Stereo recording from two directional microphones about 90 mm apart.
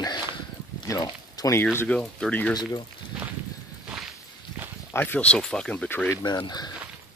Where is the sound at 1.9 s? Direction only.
10° left (ahead or behind).